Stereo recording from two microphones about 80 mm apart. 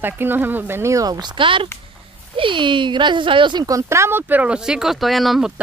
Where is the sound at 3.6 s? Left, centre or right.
Right.